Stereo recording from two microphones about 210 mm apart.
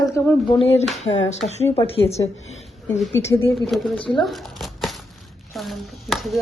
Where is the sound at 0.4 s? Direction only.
25° left (ahead or behind).